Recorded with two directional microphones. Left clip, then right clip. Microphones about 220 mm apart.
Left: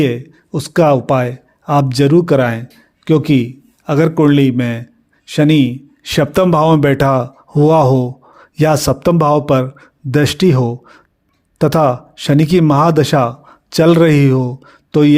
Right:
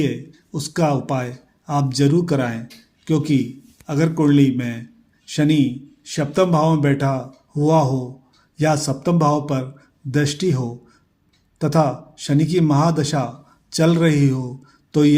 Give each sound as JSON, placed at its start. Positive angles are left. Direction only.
{"t": 0.0, "sound": "a man's voice", "side_deg": 40}